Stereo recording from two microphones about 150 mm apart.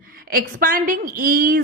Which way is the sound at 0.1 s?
75° right (ahead or behind).